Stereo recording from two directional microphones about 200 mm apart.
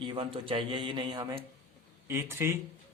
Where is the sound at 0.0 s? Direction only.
25° right (ahead or behind).